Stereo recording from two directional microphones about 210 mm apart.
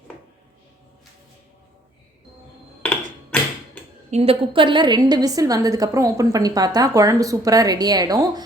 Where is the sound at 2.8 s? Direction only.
5° left (ahead or behind).